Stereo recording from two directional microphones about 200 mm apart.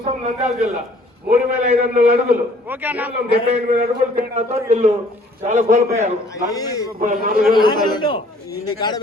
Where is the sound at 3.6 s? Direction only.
45° right (ahead or behind).